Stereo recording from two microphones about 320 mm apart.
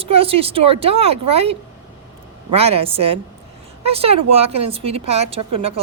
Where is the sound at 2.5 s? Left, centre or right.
Centre.